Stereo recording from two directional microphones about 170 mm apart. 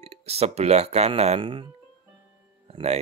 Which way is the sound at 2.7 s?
40° right (ahead or behind).